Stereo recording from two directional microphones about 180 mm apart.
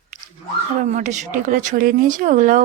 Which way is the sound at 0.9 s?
45° right (ahead or behind).